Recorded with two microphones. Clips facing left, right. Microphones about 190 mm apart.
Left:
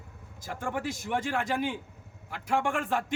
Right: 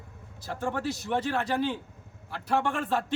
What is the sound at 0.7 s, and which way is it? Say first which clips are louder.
A man's voice: right 1 dB; 10° left (ahead or behind).